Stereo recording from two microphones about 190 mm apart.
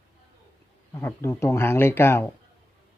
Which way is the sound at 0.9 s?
15° left (ahead or behind).